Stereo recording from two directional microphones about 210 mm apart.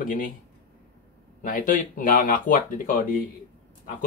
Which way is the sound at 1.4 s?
40° left (ahead or behind).